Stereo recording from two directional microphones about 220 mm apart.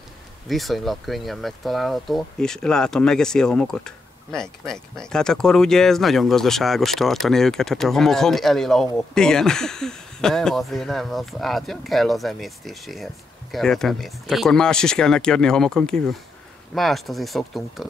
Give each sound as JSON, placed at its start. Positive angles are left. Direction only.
{"t": 0.5, "sound": "speech", "side_deg": 0}